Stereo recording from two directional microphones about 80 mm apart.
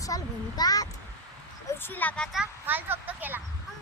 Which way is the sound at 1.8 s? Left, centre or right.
Left.